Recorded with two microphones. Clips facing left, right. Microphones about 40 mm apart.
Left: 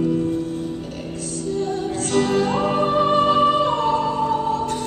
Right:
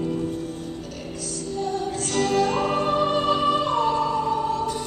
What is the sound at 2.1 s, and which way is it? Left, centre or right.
Music, left.